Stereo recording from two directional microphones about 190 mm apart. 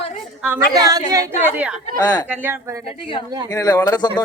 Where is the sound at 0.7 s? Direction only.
20° right (ahead or behind).